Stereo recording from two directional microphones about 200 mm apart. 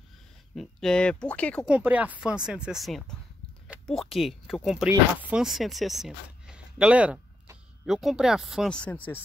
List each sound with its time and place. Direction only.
0.6 s speech: 5° left (ahead or behind)
1.7 s speech: 10° right (ahead or behind); by 9.2 s 10° left (ahead or behind)